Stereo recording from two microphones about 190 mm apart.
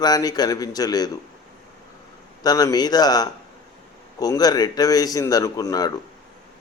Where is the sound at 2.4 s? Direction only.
20° left (ahead or behind).